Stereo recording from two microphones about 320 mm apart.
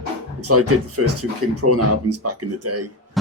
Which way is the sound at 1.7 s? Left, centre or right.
Right.